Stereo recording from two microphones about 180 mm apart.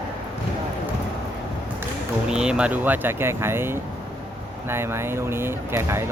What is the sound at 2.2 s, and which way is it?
Speech, 5° right (ahead or behind).